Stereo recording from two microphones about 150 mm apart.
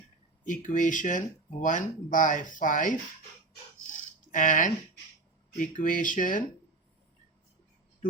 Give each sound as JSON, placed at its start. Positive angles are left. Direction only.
{"t": 0.4, "sound": "speech", "side_deg": 60}
{"t": 4.3, "sound": "speech", "side_deg": 60}